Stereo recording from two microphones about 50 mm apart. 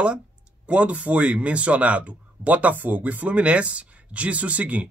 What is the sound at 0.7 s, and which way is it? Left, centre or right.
Speech, right.